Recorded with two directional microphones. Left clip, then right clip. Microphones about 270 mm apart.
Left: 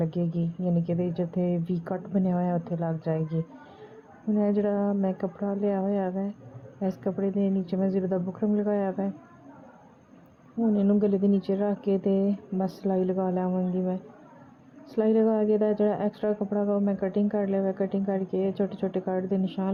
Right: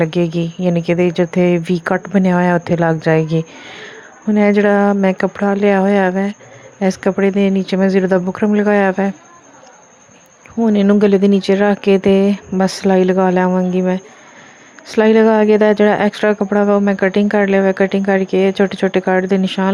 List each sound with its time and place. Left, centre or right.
0.0 s a woman's voice: right
10.7 s speech: right
16.3 s speech: right
16.6 s speech: right